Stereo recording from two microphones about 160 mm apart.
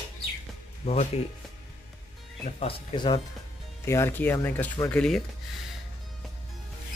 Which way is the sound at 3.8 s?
15° left (ahead or behind).